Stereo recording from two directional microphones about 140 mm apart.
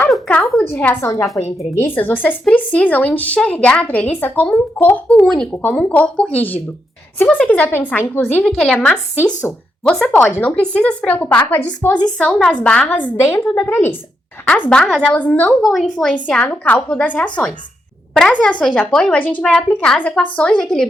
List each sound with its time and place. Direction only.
0.1 s a sound: 10° left (ahead or behind)
0.6 s a woman's voice: 15° left (ahead or behind)
15.6 s a woman's voice: centre (ahead or behind)